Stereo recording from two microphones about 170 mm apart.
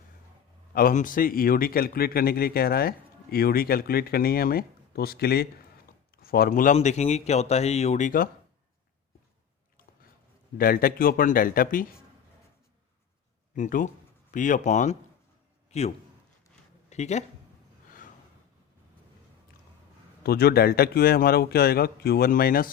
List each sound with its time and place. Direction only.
0.7 s a man's voice: 60° left (ahead or behind)
10.6 s a man's voice: 60° left (ahead or behind)
13.5 s speech: 50° left (ahead or behind)
16.9 s speech: 40° left (ahead or behind)
20.2 s a man's voice: 65° left (ahead or behind)